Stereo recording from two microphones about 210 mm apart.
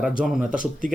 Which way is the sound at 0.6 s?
40° right (ahead or behind).